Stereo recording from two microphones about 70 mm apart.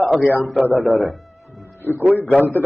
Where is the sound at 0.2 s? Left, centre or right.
Left.